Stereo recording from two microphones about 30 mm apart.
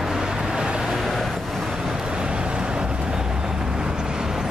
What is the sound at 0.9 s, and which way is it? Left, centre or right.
Vehicle, centre.